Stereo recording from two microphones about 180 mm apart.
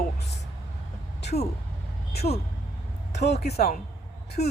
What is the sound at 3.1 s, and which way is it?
Speech, 70° left (ahead or behind).